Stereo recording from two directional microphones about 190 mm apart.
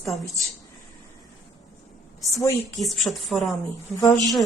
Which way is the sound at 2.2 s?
15° left (ahead or behind).